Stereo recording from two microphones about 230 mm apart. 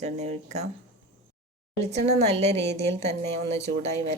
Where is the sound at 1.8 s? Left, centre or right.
Right.